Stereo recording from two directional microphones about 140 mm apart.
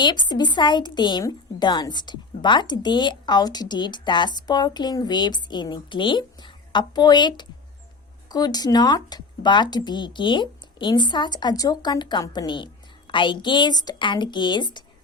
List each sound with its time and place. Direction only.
0.0 s speech: 30° left (ahead or behind)